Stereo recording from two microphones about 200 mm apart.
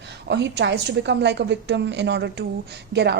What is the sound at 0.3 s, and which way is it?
A woman's voice, 60° right (ahead or behind).